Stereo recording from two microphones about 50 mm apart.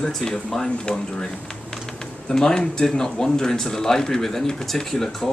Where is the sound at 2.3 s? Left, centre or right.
Centre.